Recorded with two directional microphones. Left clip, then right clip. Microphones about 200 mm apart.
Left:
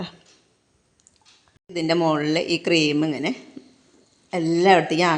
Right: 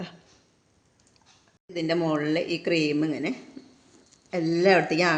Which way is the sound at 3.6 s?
25° left (ahead or behind).